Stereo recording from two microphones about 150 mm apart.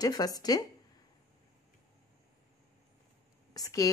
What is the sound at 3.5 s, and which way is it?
Speech, 25° left (ahead or behind).